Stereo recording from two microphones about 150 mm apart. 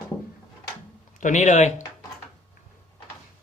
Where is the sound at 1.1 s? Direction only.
55° left (ahead or behind).